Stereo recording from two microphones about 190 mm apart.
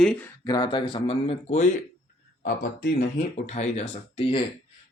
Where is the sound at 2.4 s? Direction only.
55° left (ahead or behind).